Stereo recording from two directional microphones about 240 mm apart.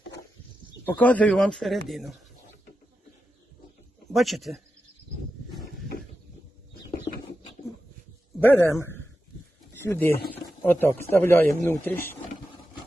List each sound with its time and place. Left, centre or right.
0.9 s speech: centre
4.1 s speech: centre
7.1 s a sound: left
8.4 s a man's voice: centre